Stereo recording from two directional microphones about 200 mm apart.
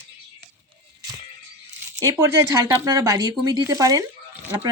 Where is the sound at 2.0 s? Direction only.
15° right (ahead or behind).